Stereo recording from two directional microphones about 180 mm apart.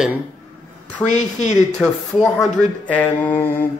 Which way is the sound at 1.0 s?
40° left (ahead or behind).